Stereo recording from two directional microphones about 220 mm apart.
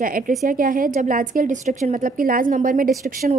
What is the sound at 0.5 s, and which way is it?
A woman's voice, 40° right (ahead or behind).